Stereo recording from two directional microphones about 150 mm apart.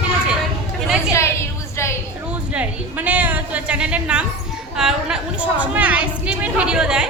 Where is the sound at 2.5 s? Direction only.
10° right (ahead or behind).